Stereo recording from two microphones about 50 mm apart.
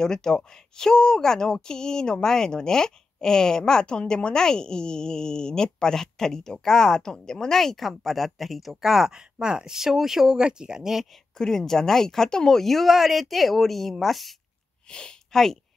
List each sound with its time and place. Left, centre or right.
0.0 s speech: centre
11.3 s a woman's voice: centre
14.9 s speech: centre